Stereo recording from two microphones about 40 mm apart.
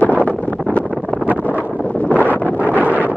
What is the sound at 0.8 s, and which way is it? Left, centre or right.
Wind noise, centre.